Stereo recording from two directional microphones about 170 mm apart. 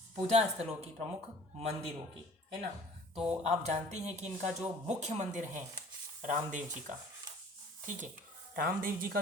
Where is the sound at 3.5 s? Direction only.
40° right (ahead or behind).